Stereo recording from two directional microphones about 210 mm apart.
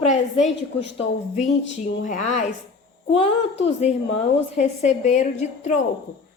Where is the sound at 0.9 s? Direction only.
30° left (ahead or behind).